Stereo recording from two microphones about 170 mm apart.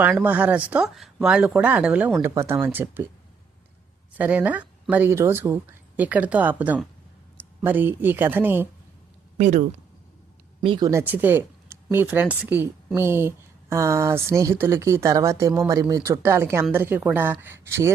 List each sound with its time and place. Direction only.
0.0 s speech: 10° right (ahead or behind)
4.2 s speech: 10° right (ahead or behind)
9.4 s speech: 45° right (ahead or behind)
10.6 s speech: 30° right (ahead or behind)